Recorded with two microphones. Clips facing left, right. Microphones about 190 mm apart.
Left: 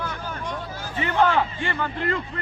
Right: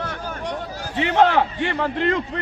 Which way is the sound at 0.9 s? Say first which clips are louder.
Right 4 dB; 75° right (ahead or behind).